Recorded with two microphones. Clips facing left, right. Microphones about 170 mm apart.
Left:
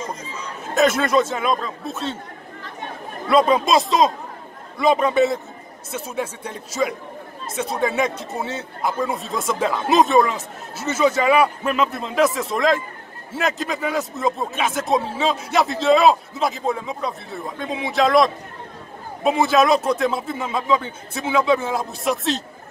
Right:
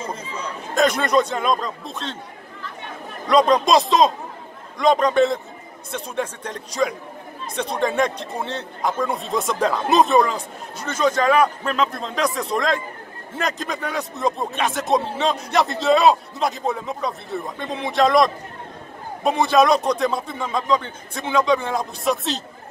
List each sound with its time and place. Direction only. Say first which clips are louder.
0.0 s chatter: right 1 dB; 30° right (ahead or behind)
0.7 s speech: left 1 dB; 5° left (ahead or behind)
3.3 s speech: right 1 dB; 5° left (ahead or behind)